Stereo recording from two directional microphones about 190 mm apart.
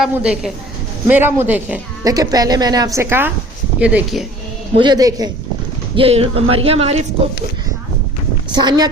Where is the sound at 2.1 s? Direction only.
20° right (ahead or behind); by 4.2 s 5° right (ahead or behind).